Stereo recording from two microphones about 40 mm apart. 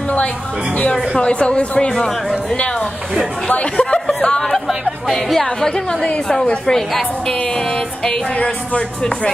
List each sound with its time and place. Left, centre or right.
1.2 s speech: left
3.4 s speech: left
5.1 s a woman's voice: centre
6.4 s speech: left
8.0 s speech: left